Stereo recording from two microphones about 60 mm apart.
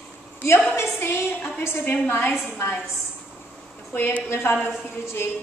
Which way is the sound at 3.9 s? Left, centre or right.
Left.